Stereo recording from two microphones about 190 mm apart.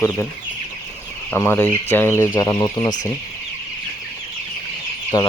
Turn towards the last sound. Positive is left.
turn(degrees=20)  # may be behind; listen again after turning